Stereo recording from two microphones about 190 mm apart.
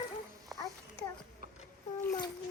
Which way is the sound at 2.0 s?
15° left (ahead or behind).